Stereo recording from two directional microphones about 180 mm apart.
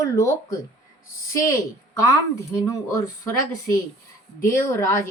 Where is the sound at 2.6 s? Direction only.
15° left (ahead or behind).